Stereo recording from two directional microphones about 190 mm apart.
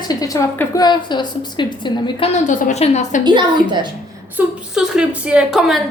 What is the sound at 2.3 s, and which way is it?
Speech, 40° left (ahead or behind).